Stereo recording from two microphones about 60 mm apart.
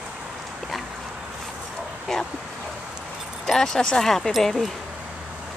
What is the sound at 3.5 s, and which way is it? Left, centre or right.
Speech, centre.